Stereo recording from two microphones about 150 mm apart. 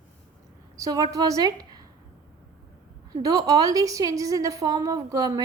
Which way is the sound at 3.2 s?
25° right (ahead or behind).